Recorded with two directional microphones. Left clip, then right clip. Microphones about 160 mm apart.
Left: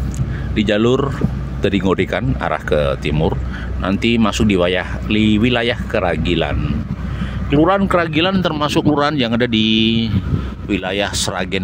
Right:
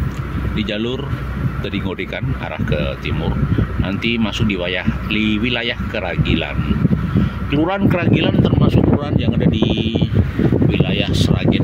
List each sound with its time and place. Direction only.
0.6 s speech: 35° left (ahead or behind)
7.5 s speech: 20° left (ahead or behind)
8.5 s speech: 50° left (ahead or behind)